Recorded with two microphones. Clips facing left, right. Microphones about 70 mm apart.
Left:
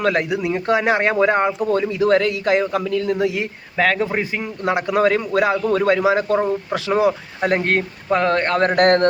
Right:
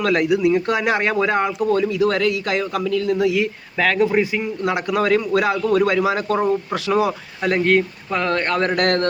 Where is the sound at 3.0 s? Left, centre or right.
Left.